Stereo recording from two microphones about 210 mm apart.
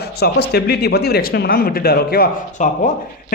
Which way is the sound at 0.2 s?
50° left (ahead or behind).